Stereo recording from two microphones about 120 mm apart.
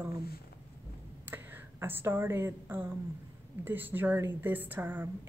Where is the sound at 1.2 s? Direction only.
15° right (ahead or behind).